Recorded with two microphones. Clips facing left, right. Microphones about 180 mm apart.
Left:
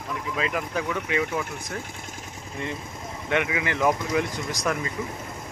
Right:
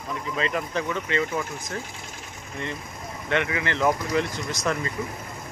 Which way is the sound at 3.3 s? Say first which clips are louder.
Even; 15° left (ahead or behind).